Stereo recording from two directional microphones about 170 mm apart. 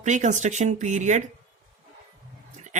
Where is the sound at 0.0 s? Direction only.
45° right (ahead or behind).